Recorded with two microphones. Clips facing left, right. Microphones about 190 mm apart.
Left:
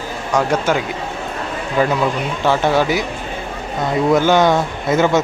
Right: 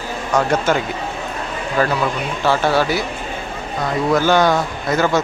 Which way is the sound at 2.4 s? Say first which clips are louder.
Left 1 dB; 20° left (ahead or behind).